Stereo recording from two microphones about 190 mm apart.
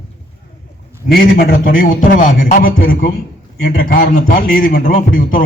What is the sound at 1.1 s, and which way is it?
A man's voice, 50° left (ahead or behind).